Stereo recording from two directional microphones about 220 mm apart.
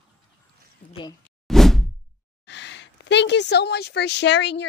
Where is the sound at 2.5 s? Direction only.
55° left (ahead or behind).